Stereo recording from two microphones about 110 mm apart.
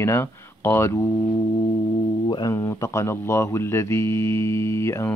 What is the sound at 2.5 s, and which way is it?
Speech, 30° left (ahead or behind).